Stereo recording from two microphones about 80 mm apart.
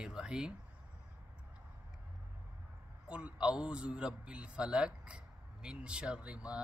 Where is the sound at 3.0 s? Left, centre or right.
Centre.